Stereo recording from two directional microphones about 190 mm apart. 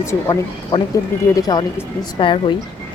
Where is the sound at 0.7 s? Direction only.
25° left (ahead or behind).